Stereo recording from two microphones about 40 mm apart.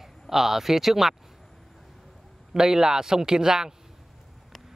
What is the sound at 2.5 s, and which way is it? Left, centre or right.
Speech, centre.